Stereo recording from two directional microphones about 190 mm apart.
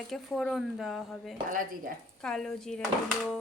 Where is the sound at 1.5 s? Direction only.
45° right (ahead or behind).